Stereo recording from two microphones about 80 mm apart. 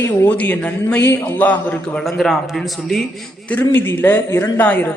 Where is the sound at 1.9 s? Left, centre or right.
Centre.